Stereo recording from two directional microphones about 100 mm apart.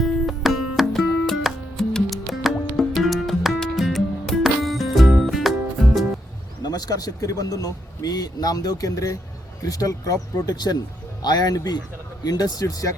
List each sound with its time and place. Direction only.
0.0 s music: centre (ahead or behind)
6.6 s a man's voice: 40° left (ahead or behind)